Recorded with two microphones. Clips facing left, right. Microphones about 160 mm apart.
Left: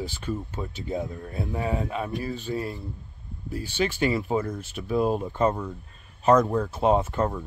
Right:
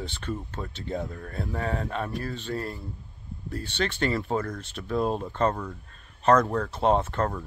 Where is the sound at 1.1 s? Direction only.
20° left (ahead or behind).